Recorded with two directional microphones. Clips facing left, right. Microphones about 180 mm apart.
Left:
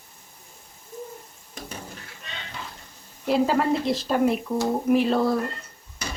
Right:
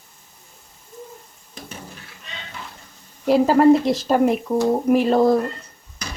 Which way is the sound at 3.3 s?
45° right (ahead or behind).